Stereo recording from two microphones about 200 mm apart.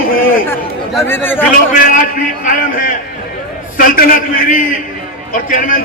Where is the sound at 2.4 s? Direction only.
40° left (ahead or behind).